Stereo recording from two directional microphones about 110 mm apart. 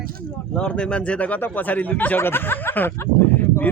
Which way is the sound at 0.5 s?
10° left (ahead or behind).